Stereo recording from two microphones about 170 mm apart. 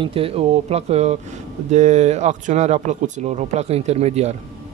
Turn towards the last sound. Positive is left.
turn(degrees=-40)  # may be behind; listen again after turning